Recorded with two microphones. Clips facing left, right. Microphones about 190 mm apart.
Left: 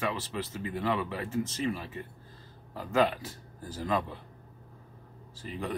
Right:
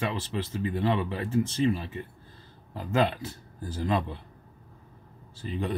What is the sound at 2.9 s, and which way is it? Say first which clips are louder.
Speech: right 1 dB; 30° right (ahead or behind).